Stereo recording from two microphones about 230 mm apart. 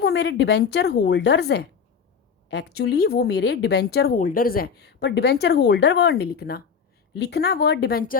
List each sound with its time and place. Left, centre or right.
0.0 s speech: left